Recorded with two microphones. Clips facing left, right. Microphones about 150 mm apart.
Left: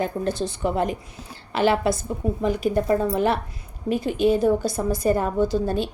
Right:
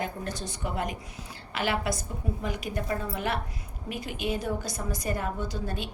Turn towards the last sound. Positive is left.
turn(degrees=30)  # may be behind; listen again after turning